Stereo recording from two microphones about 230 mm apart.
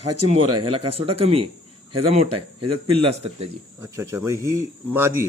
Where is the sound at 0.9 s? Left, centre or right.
Right.